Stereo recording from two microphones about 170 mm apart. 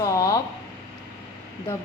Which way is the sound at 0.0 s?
20° left (ahead or behind).